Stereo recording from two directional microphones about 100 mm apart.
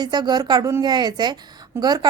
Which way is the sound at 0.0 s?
45° right (ahead or behind).